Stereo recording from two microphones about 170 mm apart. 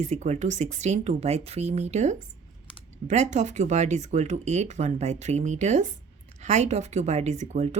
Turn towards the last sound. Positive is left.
turn(degrees=-40)  # may be behind; listen again after turning